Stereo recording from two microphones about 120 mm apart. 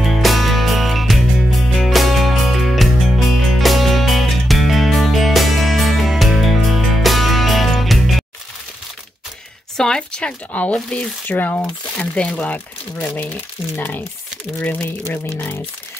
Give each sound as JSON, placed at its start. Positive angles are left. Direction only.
{"t": 0.0, "sound": "music", "side_deg": 0}
{"t": 9.8, "sound": "speech", "side_deg": 5}
{"t": 13.7, "sound": "speech", "side_deg": 15}